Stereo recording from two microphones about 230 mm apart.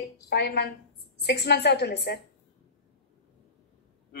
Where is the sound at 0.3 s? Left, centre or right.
Left.